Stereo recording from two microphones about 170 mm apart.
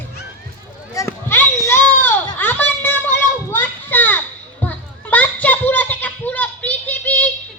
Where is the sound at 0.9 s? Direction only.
15° left (ahead or behind).